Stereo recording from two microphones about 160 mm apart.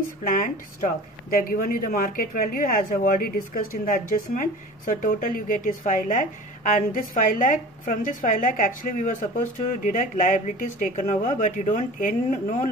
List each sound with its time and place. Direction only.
0.3 s speech: 55° left (ahead or behind)